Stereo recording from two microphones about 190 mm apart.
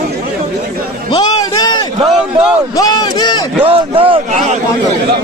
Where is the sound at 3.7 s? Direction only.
30° right (ahead or behind).